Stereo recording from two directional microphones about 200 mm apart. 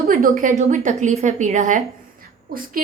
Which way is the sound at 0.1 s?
45° right (ahead or behind).